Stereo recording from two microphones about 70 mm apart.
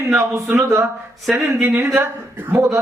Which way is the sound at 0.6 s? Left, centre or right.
Right.